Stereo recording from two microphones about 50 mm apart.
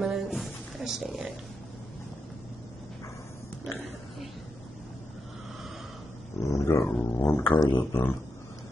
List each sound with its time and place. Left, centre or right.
0.0 s a sound: centre
6.4 s dog: left
6.8 s speech: left